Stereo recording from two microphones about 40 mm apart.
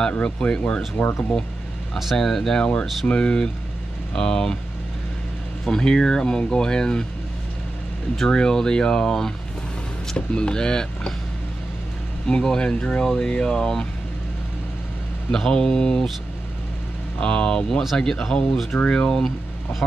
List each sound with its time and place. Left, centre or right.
0.2 s speech: left
2.1 s speech: centre
5.7 s speech: centre
8.3 s speech: centre
12.3 s speech: left
15.3 s speech: centre
17.2 s speech: left